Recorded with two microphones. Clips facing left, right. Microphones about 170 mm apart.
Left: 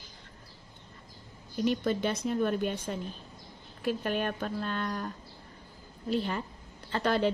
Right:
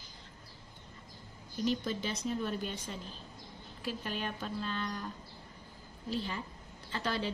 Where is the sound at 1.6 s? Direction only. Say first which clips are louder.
Left 5 dB; 60° left (ahead or behind).